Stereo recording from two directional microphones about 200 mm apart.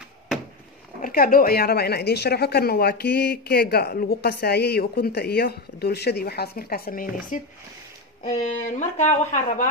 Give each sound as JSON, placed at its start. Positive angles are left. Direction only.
{"t": 1.0, "sound": "a woman's voice", "side_deg": 45}